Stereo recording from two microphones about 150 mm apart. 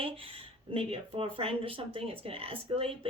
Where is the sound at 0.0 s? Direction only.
40° right (ahead or behind).